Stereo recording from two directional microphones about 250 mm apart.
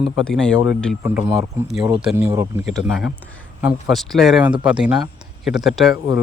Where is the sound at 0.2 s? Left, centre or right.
Centre.